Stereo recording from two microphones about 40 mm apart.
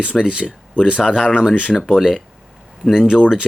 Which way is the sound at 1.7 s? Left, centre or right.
Centre.